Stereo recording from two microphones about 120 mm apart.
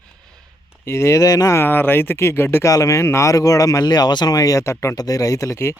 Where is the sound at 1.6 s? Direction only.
15° left (ahead or behind).